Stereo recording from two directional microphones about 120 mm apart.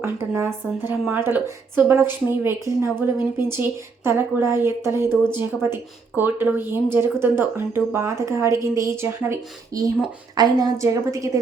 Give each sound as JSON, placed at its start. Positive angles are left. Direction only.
{"t": 0.0, "sound": "speech", "side_deg": -20}
{"t": 10.3, "sound": "speech", "side_deg": -35}